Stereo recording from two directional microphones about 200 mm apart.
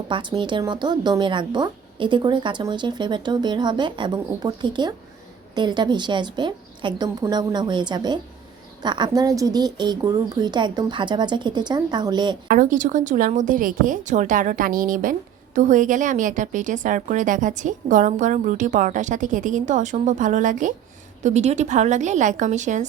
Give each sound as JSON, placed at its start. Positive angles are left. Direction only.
{"t": 0.1, "sound": "a woman's voice", "side_deg": -25}
{"t": 12.5, "sound": "a woman's voice", "side_deg": -40}